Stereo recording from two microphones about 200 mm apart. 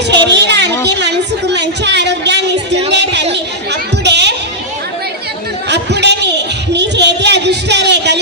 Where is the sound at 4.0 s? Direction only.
60° right (ahead or behind).